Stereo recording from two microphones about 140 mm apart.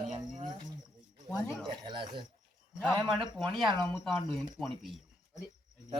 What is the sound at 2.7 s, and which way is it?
Speech, centre (ahead or behind).